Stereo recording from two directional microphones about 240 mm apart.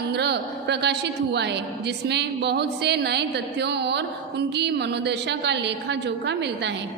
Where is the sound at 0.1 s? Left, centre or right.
Right.